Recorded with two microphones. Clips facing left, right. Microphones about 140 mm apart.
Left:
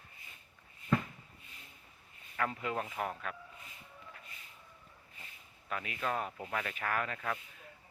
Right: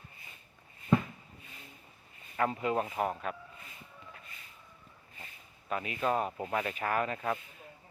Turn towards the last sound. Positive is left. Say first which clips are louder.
# right 4 dB
turn(degrees=-25)  # may be behind; listen again after turning